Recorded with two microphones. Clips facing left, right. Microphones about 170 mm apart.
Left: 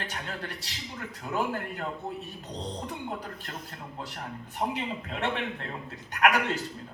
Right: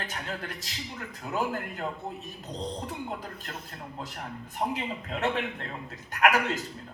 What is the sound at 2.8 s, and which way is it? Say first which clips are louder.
A man's voice: even; 40° right (ahead or behind).